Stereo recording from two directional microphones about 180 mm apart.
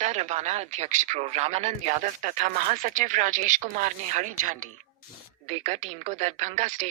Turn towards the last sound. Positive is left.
turn(degrees=-40)  # may be behind; listen again after turning